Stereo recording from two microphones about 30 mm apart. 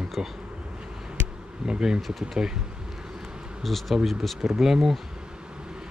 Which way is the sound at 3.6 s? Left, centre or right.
Centre.